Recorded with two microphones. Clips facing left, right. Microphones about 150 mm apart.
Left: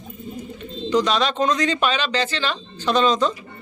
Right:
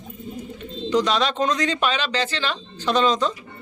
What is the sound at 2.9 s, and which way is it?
Speech, 30° left (ahead or behind).